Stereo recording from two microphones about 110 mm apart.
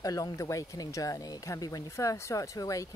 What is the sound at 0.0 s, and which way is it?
Speech, 35° left (ahead or behind).